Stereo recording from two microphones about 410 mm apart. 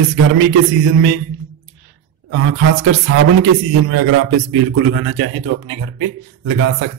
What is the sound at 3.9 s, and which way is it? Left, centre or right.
A man's voice, right.